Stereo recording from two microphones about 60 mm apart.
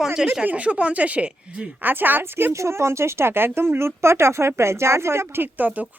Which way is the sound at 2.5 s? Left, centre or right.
Right.